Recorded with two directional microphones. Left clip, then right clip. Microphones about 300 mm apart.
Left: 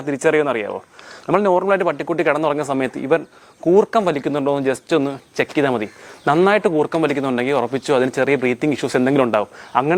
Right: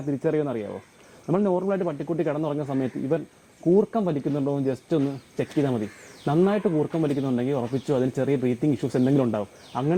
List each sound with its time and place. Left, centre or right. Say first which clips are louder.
0.1 s speech: left 9 dB; centre
6.7 s speech: left 7 dB; left
7.0 s speech: left 7 dB; centre